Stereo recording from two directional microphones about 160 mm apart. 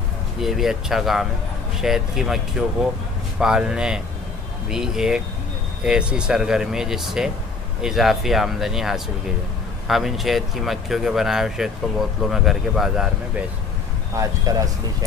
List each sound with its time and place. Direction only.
0.4 s speech: centre (ahead or behind)
14.1 s speech: 20° right (ahead or behind)